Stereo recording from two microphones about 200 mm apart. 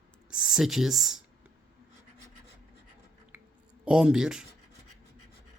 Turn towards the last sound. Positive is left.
turn(degrees=-5)  # may be behind; listen again after turning